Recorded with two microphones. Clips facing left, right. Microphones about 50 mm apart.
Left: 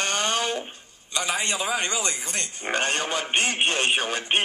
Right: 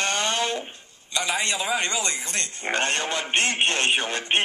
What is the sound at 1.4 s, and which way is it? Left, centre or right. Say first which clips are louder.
Speech: right 1 dB; centre.